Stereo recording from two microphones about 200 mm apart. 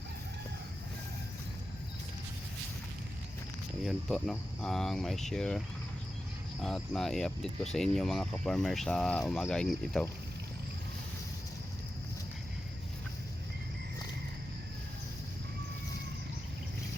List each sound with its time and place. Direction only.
3.8 s speech: centre (ahead or behind)